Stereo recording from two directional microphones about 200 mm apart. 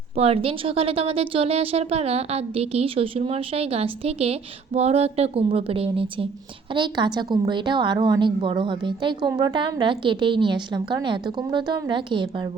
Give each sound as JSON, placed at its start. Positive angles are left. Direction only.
{"t": 0.2, "sound": "a woman's voice", "side_deg": -30}